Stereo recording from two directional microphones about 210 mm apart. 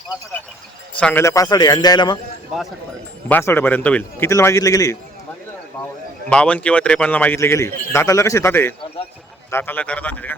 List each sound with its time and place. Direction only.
0.9 s a man's voice: 10° left (ahead or behind)
3.2 s a man's voice: 10° left (ahead or behind)
6.2 s a man's voice: 5° left (ahead or behind)